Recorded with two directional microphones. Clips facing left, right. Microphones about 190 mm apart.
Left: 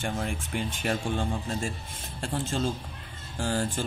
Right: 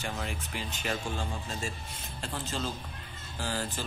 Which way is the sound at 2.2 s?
50° left (ahead or behind).